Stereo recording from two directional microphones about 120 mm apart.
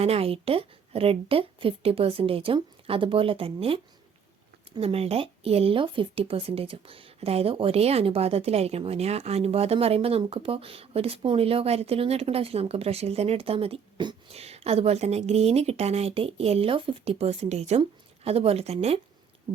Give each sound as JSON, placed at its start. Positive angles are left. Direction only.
{"t": 0.0, "sound": "a woman's voice", "side_deg": -55}
{"t": 4.8, "sound": "speech", "side_deg": -55}